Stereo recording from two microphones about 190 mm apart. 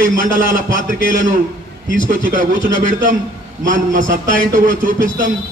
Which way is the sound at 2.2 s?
45° right (ahead or behind).